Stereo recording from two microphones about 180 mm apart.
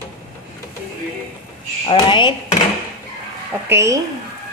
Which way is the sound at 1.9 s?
25° left (ahead or behind).